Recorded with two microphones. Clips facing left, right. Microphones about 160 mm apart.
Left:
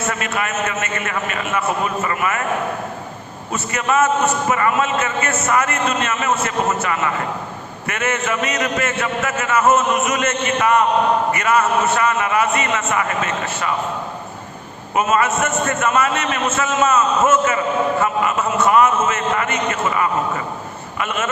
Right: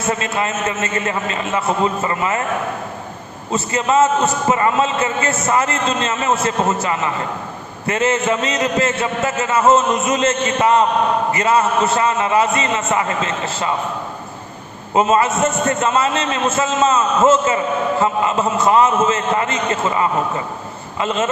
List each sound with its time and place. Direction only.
0.1 s a man's voice: 25° right (ahead or behind)
3.5 s a man's voice: 25° right (ahead or behind)
14.9 s a man's voice: 30° right (ahead or behind)